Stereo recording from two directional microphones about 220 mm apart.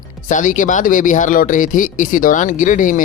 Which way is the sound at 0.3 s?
35° left (ahead or behind).